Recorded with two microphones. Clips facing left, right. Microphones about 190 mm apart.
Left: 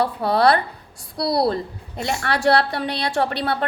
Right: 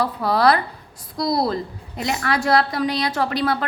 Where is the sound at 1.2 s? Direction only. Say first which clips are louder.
Left 1 dB; 70° left (ahead or behind).